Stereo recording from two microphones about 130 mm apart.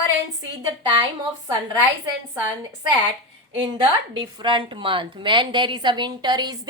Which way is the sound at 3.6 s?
40° right (ahead or behind).